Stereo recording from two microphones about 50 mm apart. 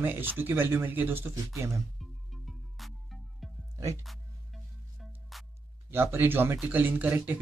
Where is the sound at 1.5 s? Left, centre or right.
Right.